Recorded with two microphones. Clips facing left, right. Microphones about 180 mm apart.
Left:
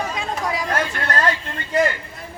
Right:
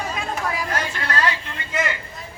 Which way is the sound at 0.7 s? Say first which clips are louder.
Left 3 dB; 55° left (ahead or behind).